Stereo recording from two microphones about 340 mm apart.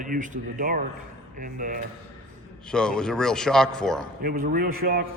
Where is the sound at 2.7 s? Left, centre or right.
Centre.